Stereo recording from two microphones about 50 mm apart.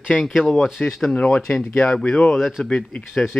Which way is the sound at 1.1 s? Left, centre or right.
Left.